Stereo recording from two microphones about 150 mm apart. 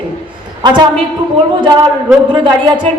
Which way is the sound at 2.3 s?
30° right (ahead or behind).